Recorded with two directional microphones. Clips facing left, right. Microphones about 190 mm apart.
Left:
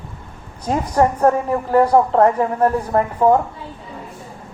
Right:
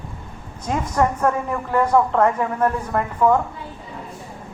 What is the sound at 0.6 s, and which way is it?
A woman's voice, 35° left (ahead or behind).